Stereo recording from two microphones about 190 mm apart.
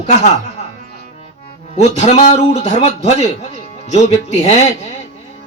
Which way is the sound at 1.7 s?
35° left (ahead or behind).